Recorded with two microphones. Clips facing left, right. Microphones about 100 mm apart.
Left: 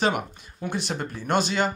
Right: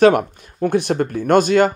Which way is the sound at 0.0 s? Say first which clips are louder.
Right 12 dB; 55° right (ahead or behind).